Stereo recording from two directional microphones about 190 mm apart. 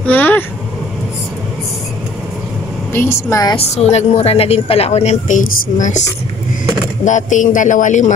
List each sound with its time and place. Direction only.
0.0 s speech: 10° left (ahead or behind)
2.9 s a woman's voice: 10° left (ahead or behind)
3.5 s a woman's voice: 35° left (ahead or behind)
7.1 s a woman's voice: 40° left (ahead or behind)